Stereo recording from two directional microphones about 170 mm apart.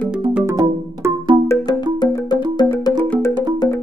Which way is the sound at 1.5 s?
20° left (ahead or behind).